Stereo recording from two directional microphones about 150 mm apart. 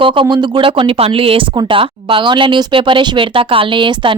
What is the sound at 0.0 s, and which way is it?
Speech, 35° right (ahead or behind).